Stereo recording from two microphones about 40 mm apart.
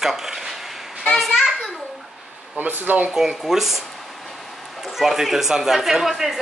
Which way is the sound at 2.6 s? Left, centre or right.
Right.